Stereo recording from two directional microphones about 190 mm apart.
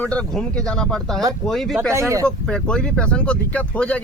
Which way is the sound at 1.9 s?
15° right (ahead or behind).